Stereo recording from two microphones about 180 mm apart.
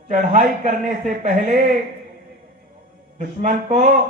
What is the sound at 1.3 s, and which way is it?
Speech, 45° right (ahead or behind).